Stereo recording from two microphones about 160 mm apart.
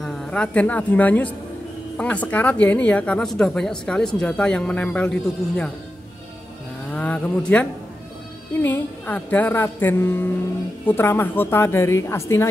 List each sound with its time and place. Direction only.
0.0 s a woman's voice: 5° left (ahead or behind)
6.9 s a sound: 10° left (ahead or behind)
8.5 s speech: 15° left (ahead or behind)